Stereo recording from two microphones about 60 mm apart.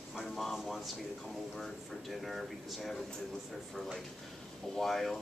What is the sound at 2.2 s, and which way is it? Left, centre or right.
Speech, centre.